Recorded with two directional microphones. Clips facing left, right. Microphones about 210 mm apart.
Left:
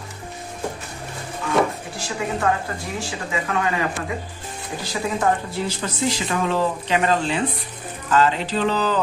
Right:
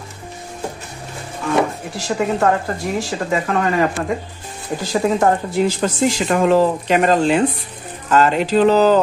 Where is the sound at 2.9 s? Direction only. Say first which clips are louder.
Right 6 dB; 45° right (ahead or behind).